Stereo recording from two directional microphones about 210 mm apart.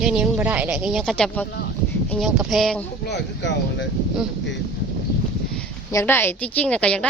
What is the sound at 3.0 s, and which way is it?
Speech, 55° left (ahead or behind).